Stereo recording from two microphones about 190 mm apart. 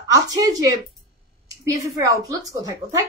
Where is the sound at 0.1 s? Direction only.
15° right (ahead or behind).